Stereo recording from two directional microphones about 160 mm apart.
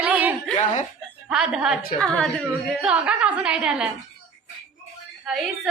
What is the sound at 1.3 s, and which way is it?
Speech, 5° right (ahead or behind).